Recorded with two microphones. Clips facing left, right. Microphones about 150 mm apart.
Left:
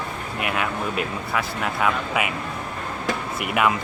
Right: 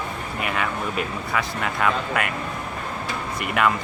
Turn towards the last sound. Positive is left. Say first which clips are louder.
# even
turn(degrees=5)  # may be behind; listen again after turning